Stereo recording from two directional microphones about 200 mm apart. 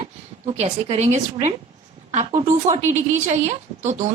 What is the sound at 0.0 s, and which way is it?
A woman's voice, 30° right (ahead or behind).